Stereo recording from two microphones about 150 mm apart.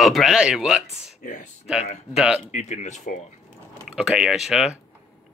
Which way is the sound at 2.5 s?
50° left (ahead or behind).